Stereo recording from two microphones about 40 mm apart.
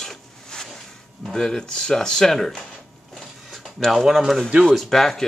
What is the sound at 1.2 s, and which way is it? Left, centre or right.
Speech, centre.